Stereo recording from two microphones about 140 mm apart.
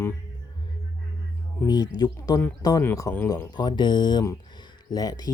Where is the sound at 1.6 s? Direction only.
30° left (ahead or behind).